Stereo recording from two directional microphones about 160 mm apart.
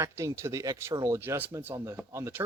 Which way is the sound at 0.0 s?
20° right (ahead or behind).